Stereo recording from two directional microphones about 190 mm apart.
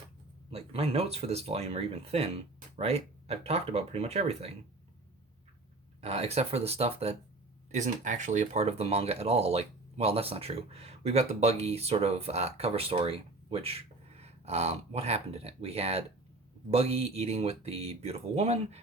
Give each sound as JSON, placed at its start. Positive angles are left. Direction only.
{"t": 0.5, "sound": "speech", "side_deg": -30}
{"t": 6.0, "sound": "speech", "side_deg": -35}